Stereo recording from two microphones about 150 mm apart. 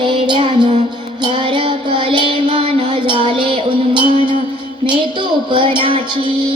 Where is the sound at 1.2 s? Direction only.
35° right (ahead or behind).